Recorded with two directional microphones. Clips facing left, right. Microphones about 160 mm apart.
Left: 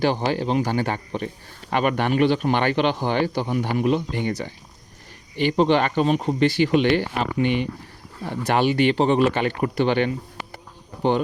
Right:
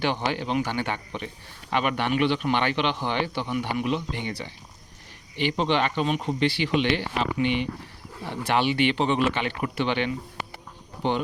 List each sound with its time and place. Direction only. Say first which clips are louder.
0.0 s a man's voice: left 5 dB; 40° left (ahead or behind)